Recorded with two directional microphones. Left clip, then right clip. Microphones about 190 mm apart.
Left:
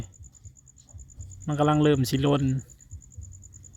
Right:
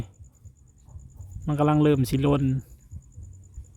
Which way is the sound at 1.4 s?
5° right (ahead or behind).